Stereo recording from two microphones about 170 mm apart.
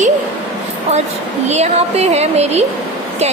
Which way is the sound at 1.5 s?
40° right (ahead or behind).